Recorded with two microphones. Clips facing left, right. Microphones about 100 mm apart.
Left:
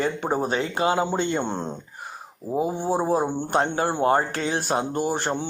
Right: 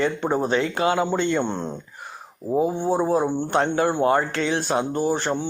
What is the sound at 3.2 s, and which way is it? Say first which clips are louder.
Speech: right 1 dB; 40° left (ahead or behind).